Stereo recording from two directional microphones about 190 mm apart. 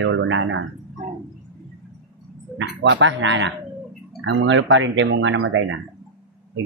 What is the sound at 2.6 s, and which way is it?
A man's voice, 70° right (ahead or behind).